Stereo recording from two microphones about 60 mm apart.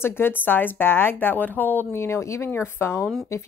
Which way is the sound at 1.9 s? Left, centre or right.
Left.